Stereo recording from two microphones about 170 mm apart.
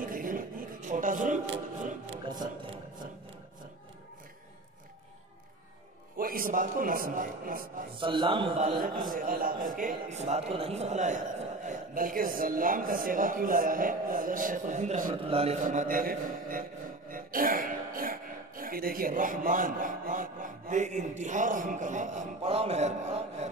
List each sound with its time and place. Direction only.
0.0 s a sound: 55° right (ahead or behind)
2.2 s a sound: 25° right (ahead or behind)
6.1 s a man's voice: 60° right (ahead or behind)
8.0 s a man's voice: 30° right (ahead or behind)
9.1 s a man's voice: 55° right (ahead or behind)
15.2 s a man's voice: 35° right (ahead or behind)